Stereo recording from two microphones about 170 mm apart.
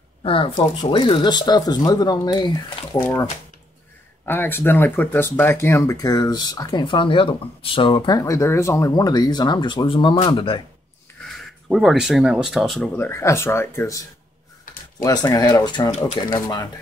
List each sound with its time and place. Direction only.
0.2 s speech: 30° left (ahead or behind)
4.3 s speech: 10° left (ahead or behind); by 10.6 s 30° left (ahead or behind)
11.7 s speech: centre (ahead or behind); by 16.6 s 25° left (ahead or behind)